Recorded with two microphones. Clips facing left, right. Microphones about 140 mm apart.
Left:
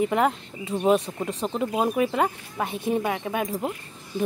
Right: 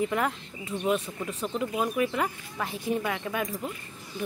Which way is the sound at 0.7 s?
35° left (ahead or behind).